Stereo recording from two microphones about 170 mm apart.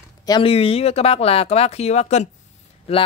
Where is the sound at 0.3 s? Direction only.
35° left (ahead or behind).